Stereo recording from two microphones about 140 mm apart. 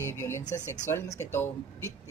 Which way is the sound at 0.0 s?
20° left (ahead or behind).